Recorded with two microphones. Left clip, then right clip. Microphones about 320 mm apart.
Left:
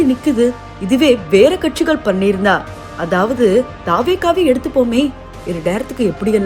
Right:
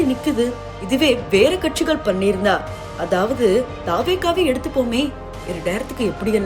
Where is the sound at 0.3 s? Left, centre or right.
Centre.